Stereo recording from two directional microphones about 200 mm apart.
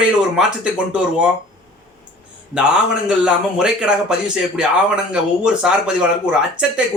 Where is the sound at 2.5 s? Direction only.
5° right (ahead or behind).